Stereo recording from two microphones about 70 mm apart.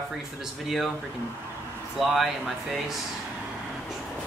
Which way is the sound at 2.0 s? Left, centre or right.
Centre.